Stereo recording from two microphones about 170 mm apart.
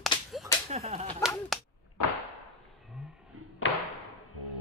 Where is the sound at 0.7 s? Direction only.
40° right (ahead or behind).